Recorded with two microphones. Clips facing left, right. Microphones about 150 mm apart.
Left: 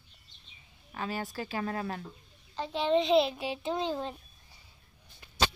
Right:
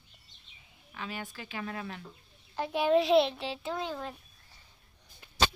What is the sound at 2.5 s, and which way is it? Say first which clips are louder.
Speech: right 2 dB; 10° right (ahead or behind).